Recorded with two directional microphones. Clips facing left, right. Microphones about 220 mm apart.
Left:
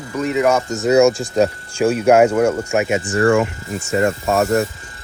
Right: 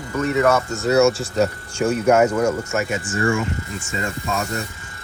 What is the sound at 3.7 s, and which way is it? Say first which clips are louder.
Speech: left 6 dB; 40° left (ahead or behind).